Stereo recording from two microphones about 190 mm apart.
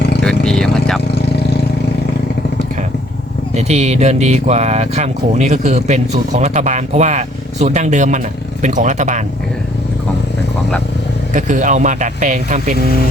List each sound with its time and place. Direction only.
0.2 s vehicle: 5° left (ahead or behind)
3.5 s speech: 35° right (ahead or behind)
11.3 s speech: 40° right (ahead or behind)